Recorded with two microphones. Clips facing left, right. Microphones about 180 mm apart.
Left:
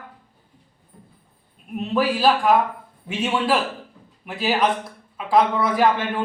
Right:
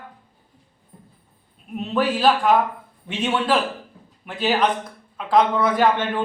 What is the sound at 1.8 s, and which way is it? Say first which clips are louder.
A man's voice: even; 5° left (ahead or behind).